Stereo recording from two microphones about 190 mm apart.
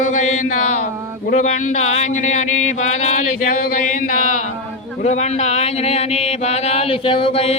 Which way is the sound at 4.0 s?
45° left (ahead or behind).